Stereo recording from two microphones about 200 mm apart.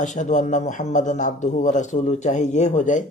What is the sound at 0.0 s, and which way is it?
Speech, 40° left (ahead or behind).